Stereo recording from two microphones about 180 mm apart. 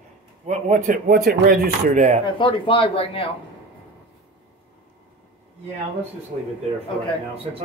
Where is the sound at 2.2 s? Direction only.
30° left (ahead or behind).